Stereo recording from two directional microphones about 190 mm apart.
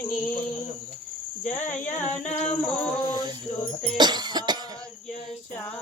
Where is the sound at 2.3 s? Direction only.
40° left (ahead or behind).